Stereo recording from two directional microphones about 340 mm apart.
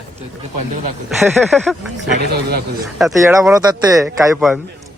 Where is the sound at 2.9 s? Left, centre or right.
Centre.